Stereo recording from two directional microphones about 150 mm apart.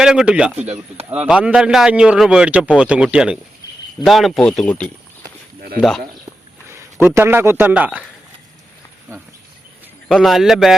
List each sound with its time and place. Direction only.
0.0 s a man's voice: 5° right (ahead or behind)
0.6 s speech: 45° right (ahead or behind)
1.1 s a man's voice: 10° right (ahead or behind)
6.7 s a man's voice: 20° right (ahead or behind)
10.1 s speech: centre (ahead or behind)